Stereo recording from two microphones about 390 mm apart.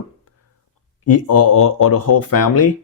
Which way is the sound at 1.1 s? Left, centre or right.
Left.